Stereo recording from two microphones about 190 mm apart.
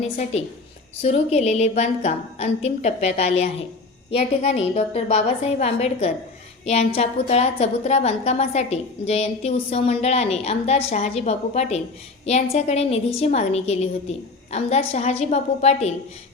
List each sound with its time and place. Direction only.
0.0 s a woman's voice: 35° left (ahead or behind)